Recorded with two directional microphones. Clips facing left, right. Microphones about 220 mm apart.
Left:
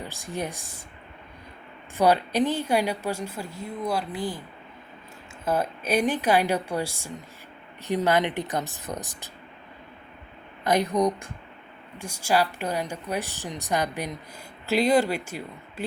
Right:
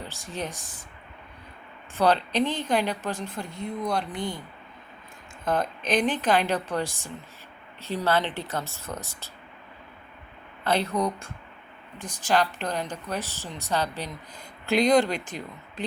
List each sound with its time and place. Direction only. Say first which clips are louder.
0.0 s a woman's voice: left 2 dB; 15° left (ahead or behind)
2.0 s a woman's voice: left 2 dB; 10° left (ahead or behind)
5.5 s a woman's voice: left 1 dB; 10° left (ahead or behind)
10.6 s a woman's voice: left 3 dB; 15° left (ahead or behind)